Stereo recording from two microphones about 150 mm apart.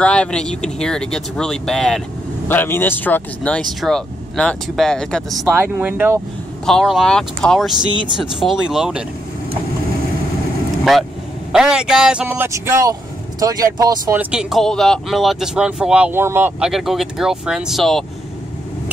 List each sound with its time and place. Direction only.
0.0 s speech: 5° left (ahead or behind)
5.5 s speech: 15° right (ahead or behind)
6.6 s speech: 5° left (ahead or behind)
11.5 s speech: 5° right (ahead or behind); by 14.1 s 25° right (ahead or behind)
14.1 s speech: 5° right (ahead or behind)